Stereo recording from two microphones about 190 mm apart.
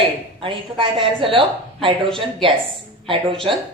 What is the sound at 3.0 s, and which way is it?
Speech, 25° right (ahead or behind).